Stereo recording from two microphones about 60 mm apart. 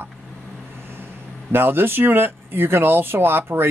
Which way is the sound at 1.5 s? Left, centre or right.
Right.